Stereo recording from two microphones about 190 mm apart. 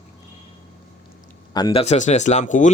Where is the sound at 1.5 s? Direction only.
20° left (ahead or behind).